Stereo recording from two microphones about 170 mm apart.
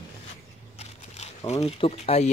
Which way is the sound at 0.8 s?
40° left (ahead or behind).